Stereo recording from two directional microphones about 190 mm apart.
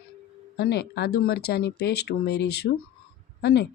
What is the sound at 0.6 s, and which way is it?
A woman's voice, 60° left (ahead or behind).